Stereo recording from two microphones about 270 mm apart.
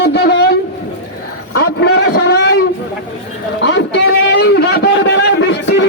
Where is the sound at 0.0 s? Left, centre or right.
Left.